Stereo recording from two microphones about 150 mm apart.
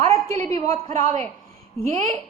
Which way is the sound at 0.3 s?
20° left (ahead or behind).